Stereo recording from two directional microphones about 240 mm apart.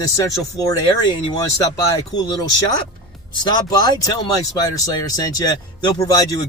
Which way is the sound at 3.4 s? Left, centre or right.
Centre.